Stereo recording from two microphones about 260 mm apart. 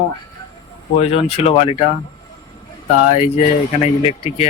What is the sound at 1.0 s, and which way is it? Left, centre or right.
Speech, left.